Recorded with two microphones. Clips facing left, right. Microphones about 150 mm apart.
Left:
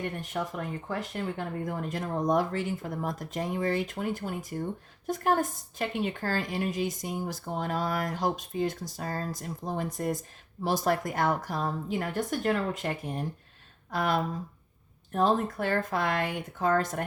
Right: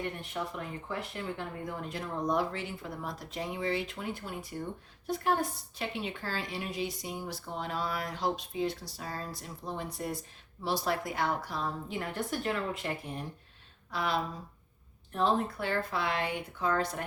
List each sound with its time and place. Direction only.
0.0 s a woman's voice: 45° left (ahead or behind)